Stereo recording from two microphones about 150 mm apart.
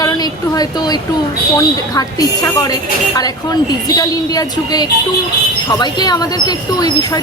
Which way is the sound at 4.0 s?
25° left (ahead or behind).